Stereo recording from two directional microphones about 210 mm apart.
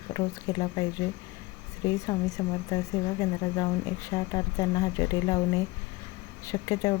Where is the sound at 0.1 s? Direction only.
15° left (ahead or behind).